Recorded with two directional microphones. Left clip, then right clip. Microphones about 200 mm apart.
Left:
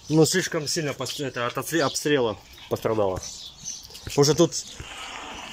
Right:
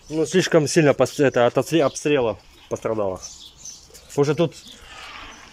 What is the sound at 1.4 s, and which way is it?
Speech, 30° right (ahead or behind).